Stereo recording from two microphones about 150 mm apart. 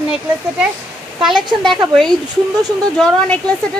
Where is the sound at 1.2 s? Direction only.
5° right (ahead or behind).